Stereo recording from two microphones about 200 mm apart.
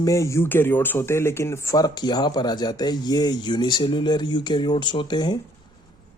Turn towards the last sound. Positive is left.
turn(degrees=20)  # may be behind; listen again after turning